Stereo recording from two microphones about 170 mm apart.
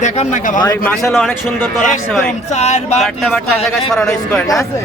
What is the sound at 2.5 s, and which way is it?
Speech, 40° left (ahead or behind).